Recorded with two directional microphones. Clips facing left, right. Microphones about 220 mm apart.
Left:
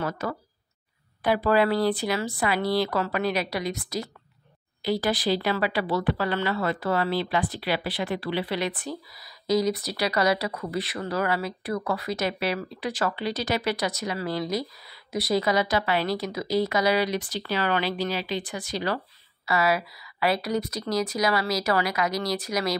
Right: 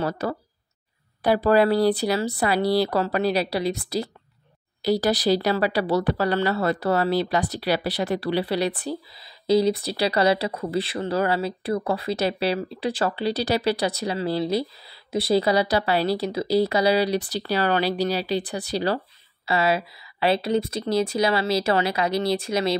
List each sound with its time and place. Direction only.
0.0 s a woman's voice: 35° right (ahead or behind)